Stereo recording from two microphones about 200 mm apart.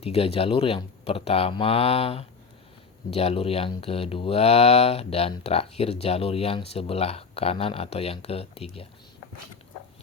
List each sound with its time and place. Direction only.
0.0 s speech: 30° left (ahead or behind)